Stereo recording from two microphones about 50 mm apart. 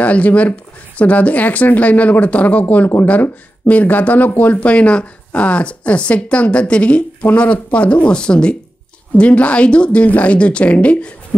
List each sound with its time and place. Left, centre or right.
0.0 s speech: left
4.6 s speech: left